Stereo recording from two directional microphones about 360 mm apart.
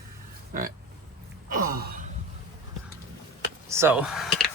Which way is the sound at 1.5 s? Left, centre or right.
Right.